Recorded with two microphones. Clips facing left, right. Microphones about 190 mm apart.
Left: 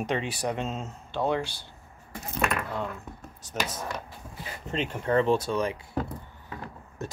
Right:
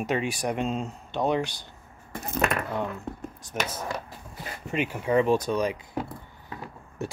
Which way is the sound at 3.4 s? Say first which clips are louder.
Left 1 dB; 15° right (ahead or behind).